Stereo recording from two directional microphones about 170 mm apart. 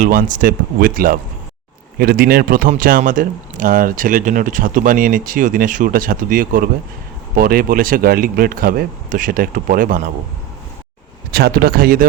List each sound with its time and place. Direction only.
0.0 s a man's voice: 50° right (ahead or behind)
11.3 s a man's voice: 65° right (ahead or behind)